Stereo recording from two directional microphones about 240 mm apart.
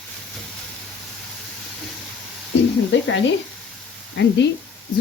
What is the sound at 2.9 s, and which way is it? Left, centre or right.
Speech, left.